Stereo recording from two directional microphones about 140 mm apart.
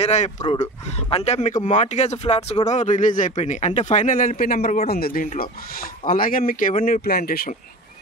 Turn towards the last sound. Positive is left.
turn(degrees=90)